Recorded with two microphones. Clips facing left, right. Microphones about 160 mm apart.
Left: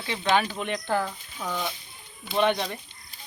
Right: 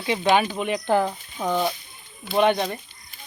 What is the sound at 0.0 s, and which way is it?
Speech, 20° right (ahead or behind).